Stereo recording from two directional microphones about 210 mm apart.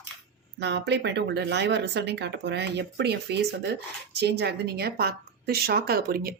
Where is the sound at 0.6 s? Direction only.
55° right (ahead or behind).